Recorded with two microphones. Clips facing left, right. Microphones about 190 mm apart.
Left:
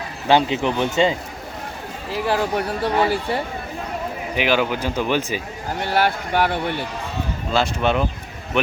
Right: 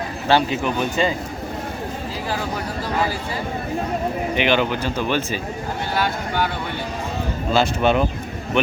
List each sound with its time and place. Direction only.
0.3 s speech: 20° left (ahead or behind)
2.2 s speech: 60° left (ahead or behind)
4.4 s speech: 5° left (ahead or behind)
5.9 s speech: 65° left (ahead or behind)
7.5 s speech: centre (ahead or behind)